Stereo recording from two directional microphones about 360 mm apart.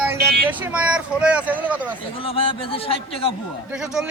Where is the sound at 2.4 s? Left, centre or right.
Centre.